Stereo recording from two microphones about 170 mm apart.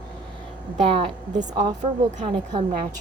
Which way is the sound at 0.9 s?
35° right (ahead or behind).